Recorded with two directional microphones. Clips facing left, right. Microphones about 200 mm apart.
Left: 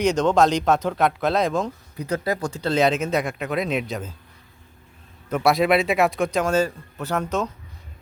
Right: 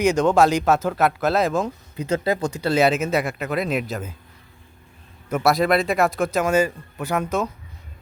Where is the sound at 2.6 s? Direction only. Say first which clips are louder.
Right 1 dB; 10° right (ahead or behind).